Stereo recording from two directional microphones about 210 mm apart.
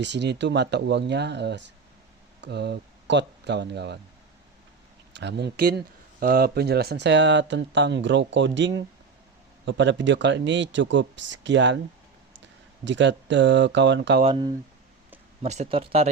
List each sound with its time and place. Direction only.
0.0 s speech: 55° right (ahead or behind)
5.1 s speech: 55° right (ahead or behind)
15.4 s speech: 30° right (ahead or behind)